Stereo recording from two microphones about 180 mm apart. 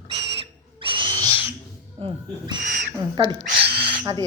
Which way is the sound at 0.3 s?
30° right (ahead or behind).